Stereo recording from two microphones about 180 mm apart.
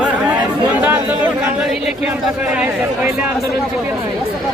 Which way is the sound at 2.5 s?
5° right (ahead or behind).